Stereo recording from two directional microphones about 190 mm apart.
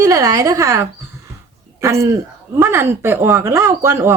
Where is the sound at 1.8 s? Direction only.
15° right (ahead or behind).